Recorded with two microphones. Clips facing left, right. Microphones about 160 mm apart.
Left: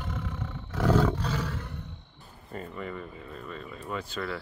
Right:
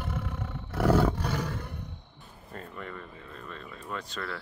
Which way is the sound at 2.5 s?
5° left (ahead or behind).